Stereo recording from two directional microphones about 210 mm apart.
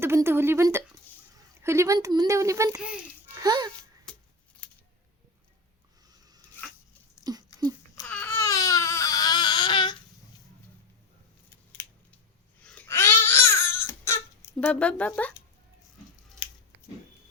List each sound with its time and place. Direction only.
0.0 s a child's voice: 10° right (ahead or behind)
7.3 s a sound: 20° right (ahead or behind)
8.0 s baby cry: 5° left (ahead or behind); by 9.9 s 20° left (ahead or behind)
12.6 s crying: 10° left (ahead or behind)
14.6 s speech: 5° left (ahead or behind)